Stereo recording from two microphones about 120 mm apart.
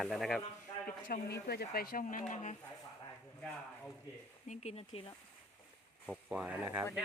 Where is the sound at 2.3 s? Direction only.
85° left.